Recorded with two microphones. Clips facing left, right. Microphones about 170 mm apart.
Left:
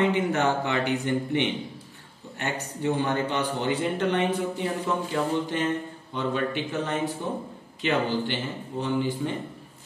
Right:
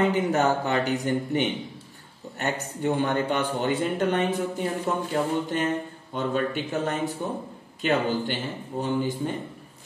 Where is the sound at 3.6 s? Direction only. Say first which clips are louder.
Even; 45° right (ahead or behind).